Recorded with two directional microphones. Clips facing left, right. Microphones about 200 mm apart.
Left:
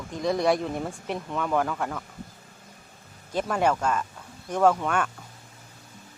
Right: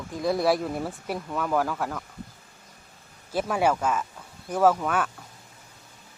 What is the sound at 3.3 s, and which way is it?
Speech, 5° right (ahead or behind).